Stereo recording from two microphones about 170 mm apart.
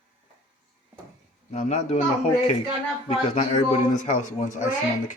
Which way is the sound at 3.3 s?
40° left (ahead or behind).